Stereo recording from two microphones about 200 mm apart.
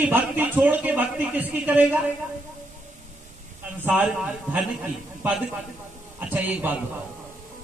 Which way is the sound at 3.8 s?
5° right (ahead or behind).